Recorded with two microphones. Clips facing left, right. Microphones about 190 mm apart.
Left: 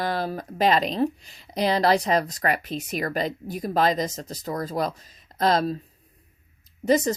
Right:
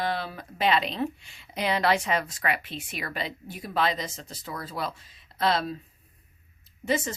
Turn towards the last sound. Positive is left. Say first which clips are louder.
# left 7 dB
turn(degrees=40)  # may be behind; listen again after turning